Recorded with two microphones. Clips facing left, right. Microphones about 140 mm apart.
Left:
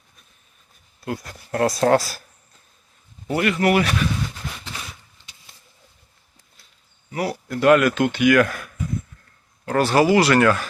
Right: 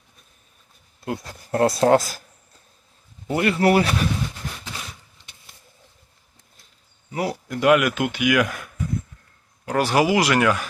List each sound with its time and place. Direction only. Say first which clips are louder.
1.0 s speech: even; 25° right (ahead or behind)
3.2 s speech: right 1 dB; 25° right (ahead or behind)
7.1 s speech: even; 20° right (ahead or behind)